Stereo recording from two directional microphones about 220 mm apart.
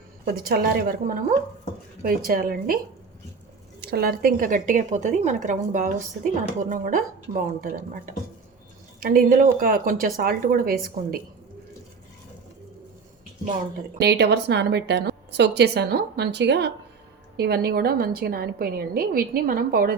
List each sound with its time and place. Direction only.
0.3 s a woman's voice: 40° right (ahead or behind)
3.8 s a woman's voice: 45° right (ahead or behind)
14.0 s a woman's voice: 50° right (ahead or behind)